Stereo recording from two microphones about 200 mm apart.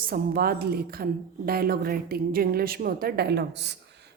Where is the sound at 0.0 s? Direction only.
50° right (ahead or behind).